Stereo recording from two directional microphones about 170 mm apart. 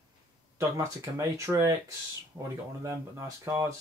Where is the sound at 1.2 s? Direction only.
15° right (ahead or behind).